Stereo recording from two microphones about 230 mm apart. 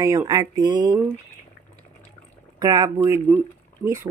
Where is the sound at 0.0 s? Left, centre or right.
Centre.